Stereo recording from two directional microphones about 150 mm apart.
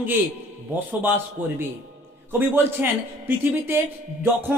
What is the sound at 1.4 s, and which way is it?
Speech, 10° right (ahead or behind).